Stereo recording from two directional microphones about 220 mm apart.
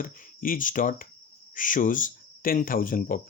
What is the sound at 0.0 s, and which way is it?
Speech, 40° left (ahead or behind).